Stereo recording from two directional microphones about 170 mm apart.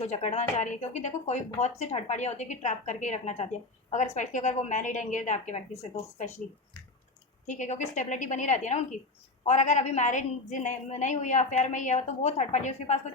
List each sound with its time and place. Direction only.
0.0 s a woman's voice: 40° left (ahead or behind)
7.4 s a woman's voice: 45° left (ahead or behind)